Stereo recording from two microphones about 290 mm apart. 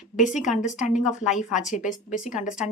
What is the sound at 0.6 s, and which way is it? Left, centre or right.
Speech, left.